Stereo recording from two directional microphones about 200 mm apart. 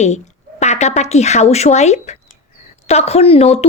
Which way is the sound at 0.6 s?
35° left (ahead or behind).